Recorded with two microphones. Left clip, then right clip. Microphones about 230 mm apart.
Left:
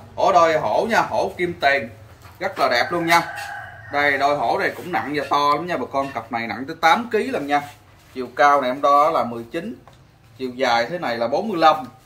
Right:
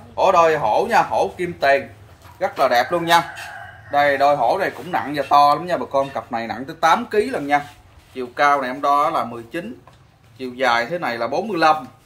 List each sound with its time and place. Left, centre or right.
0.1 s speech: centre
8.2 s a man's voice: centre